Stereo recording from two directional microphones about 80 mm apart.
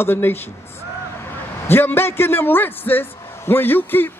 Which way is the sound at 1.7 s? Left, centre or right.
Left.